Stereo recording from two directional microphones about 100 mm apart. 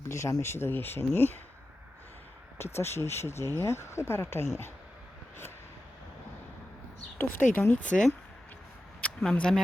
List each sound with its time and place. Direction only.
0.1 s speech: 30° left (ahead or behind)
2.6 s speech: 25° left (ahead or behind)
7.2 s speech: 20° left (ahead or behind)